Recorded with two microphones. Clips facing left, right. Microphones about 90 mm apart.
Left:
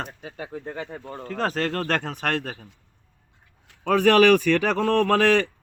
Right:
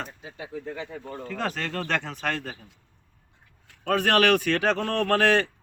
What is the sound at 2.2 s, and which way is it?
Speech, 70° left (ahead or behind).